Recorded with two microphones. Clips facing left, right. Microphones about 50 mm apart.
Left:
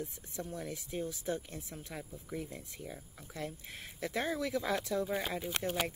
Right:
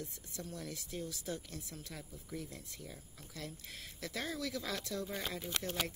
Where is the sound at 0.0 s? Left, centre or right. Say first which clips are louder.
Left 5 dB; left.